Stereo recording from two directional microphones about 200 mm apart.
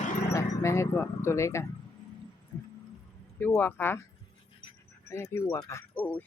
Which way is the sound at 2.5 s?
15° left (ahead or behind).